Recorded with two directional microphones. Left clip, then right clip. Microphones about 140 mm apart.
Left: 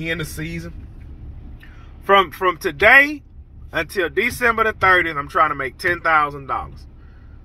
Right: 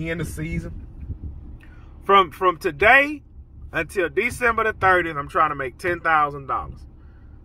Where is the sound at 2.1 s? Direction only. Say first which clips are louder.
Left 1 dB; 15° right (ahead or behind).